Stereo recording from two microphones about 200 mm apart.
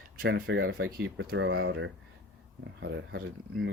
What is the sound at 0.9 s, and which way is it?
Speech, 50° right (ahead or behind).